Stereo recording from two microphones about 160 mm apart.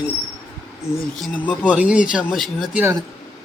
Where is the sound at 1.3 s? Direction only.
10° left (ahead or behind).